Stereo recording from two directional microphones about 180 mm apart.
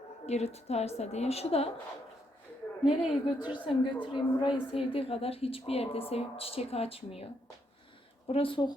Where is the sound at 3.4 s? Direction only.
25° left (ahead or behind).